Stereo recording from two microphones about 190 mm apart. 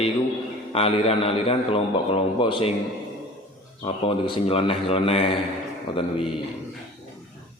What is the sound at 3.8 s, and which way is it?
Speech, 25° left (ahead or behind).